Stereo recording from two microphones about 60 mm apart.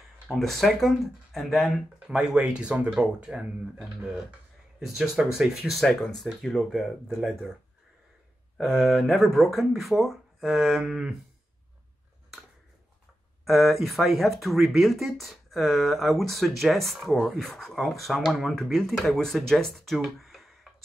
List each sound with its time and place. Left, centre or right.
0.3 s speech: centre
2.0 s speech: centre
8.5 s speech: centre
13.5 s speech: centre